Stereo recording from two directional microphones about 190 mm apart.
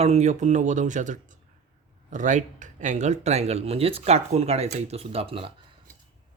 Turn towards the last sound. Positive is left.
turn(degrees=-30)  # may be behind; listen again after turning